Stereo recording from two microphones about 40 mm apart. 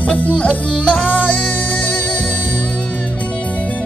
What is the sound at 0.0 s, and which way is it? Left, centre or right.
Music, left.